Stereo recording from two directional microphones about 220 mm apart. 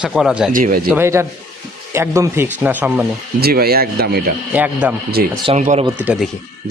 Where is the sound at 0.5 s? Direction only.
40° right (ahead or behind).